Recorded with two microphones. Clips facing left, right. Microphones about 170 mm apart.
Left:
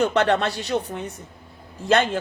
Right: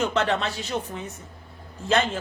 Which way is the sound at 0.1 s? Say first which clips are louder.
Left 4 dB; 65° left (ahead or behind).